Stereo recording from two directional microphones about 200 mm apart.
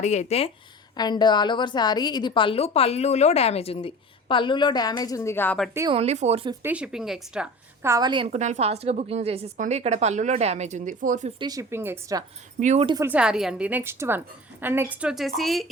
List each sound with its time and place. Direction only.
0.0 s a woman's voice: 35° left (ahead or behind); by 5.7 s 5° left (ahead or behind)
5.9 s a woman's voice: 30° right (ahead or behind)
6.6 s a woman's voice: 5° right (ahead or behind)
8.3 s a woman's voice: 35° right (ahead or behind)
11.3 s a woman's voice: 20° right (ahead or behind)
12.5 s speech: 35° right (ahead or behind)
12.8 s speech: 20° right (ahead or behind)
13.1 s a woman's voice: 5° right (ahead or behind)